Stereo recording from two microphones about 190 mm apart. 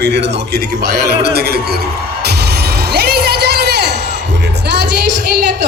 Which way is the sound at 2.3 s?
60° right (ahead or behind).